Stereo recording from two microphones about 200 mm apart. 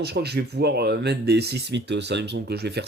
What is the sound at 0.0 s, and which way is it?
A man's voice, 55° right (ahead or behind).